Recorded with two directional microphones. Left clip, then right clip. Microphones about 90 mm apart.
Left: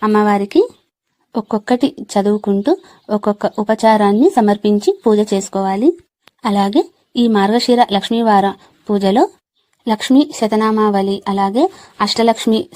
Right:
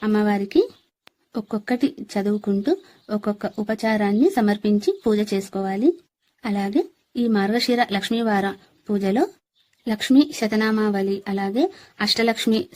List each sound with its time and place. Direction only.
0.0 s speech: 20° left (ahead or behind)
6.4 s speech: 50° left (ahead or behind); by 12.6 s 30° left (ahead or behind)